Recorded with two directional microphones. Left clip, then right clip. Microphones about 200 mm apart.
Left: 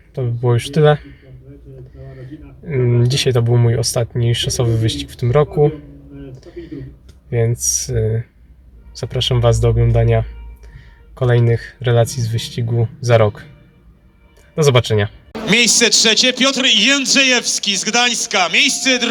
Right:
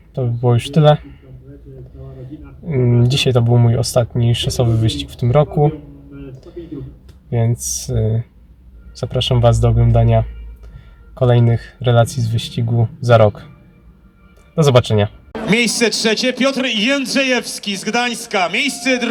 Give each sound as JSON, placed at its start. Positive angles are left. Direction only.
{"t": 0.1, "sound": "speech", "side_deg": -5}
{"t": 2.6, "sound": "speech", "side_deg": -5}
{"t": 7.3, "sound": "speech", "side_deg": -5}
{"t": 14.5, "sound": "speech", "side_deg": -5}
{"t": 15.4, "sound": "a man's voice", "side_deg": -25}